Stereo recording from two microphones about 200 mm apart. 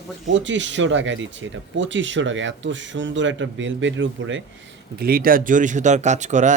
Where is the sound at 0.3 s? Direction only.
65° right (ahead or behind).